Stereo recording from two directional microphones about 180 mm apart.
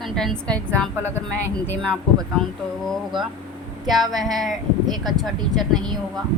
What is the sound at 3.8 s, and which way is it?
A woman's voice, centre (ahead or behind).